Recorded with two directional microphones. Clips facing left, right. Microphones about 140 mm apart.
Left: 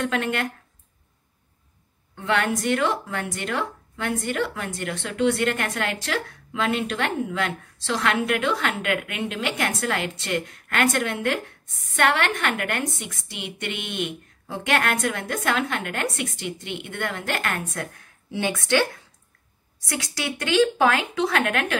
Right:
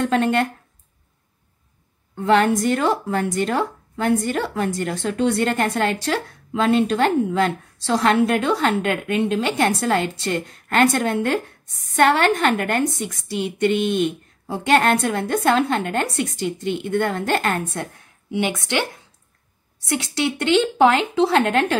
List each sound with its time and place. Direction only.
0.0 s a woman's voice: 35° right (ahead or behind)
2.2 s a woman's voice: 35° right (ahead or behind)
18.3 s speech: 20° right (ahead or behind)